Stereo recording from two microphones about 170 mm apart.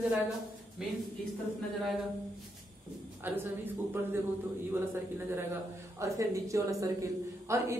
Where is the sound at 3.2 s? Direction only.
10° right (ahead or behind).